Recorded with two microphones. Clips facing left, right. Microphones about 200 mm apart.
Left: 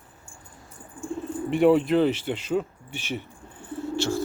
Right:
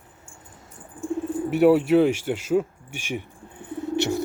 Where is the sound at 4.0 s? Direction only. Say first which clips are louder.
Right 3 dB; 20° right (ahead or behind).